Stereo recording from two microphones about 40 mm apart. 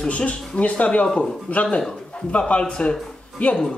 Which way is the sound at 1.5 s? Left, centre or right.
Left.